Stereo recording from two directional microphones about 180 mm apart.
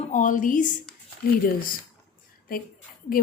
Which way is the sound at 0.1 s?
45° left (ahead or behind).